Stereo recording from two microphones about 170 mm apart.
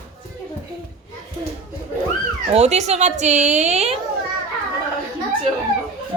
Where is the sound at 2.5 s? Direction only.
40° right (ahead or behind).